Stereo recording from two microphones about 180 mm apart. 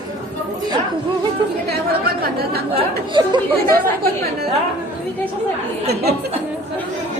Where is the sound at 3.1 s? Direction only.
25° right (ahead or behind).